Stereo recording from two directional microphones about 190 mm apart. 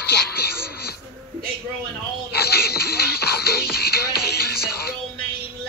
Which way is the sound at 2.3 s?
55° left (ahead or behind).